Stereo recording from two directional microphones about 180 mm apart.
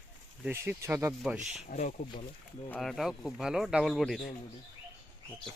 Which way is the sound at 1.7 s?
40° left (ahead or behind).